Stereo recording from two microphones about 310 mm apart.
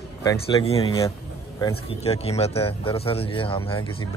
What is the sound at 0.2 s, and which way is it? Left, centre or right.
Speech, centre.